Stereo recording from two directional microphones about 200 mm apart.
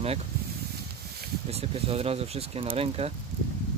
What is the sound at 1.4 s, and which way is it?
Speech, 30° right (ahead or behind).